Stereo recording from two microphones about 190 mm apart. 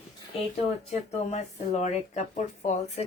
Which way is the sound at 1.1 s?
35° left (ahead or behind).